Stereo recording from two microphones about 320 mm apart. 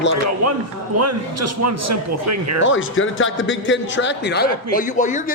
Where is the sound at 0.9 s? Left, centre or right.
Right.